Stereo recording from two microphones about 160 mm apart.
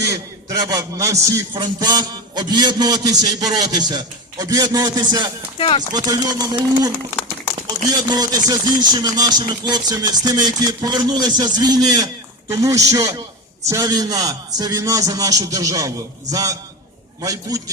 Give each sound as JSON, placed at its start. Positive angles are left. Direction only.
{"t": 0.0, "sound": "a man's voice", "side_deg": -20}
{"t": 5.5, "sound": "speech", "side_deg": 35}
{"t": 5.9, "sound": "a man's voice", "side_deg": -25}
{"t": 8.1, "sound": "a man's voice", "side_deg": -25}